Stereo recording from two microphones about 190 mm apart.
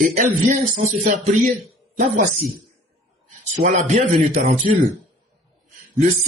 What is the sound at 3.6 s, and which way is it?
Speech, 35° right (ahead or behind).